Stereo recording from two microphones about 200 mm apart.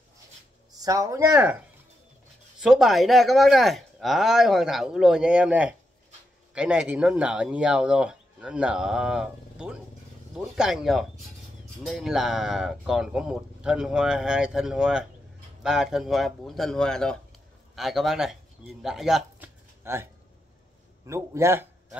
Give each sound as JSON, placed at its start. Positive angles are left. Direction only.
{"t": 0.7, "sound": "speech", "side_deg": -15}
{"t": 2.6, "sound": "speech", "side_deg": 0}
{"t": 19.8, "sound": "a man's voice", "side_deg": -10}